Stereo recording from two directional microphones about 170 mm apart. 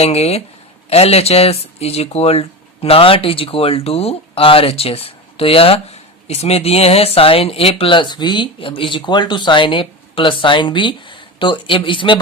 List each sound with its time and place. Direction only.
0.0 s speech: 40° left (ahead or behind)